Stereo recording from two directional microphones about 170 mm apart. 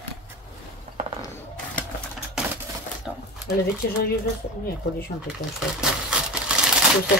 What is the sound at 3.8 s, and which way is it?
Speech, 65° left (ahead or behind).